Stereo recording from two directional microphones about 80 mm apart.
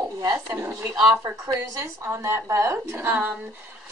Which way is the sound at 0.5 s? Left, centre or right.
Right.